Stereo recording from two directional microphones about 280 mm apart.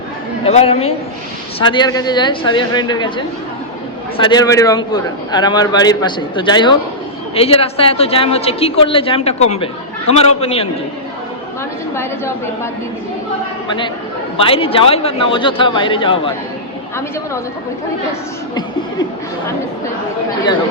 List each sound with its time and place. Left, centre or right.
0.4 s a man's voice: left
14.3 s a man's voice: centre